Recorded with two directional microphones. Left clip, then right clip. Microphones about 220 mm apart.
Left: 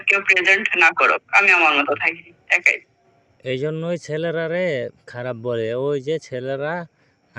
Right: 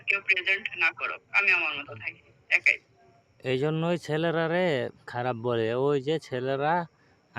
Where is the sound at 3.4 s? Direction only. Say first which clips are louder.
Left 4 dB; centre (ahead or behind).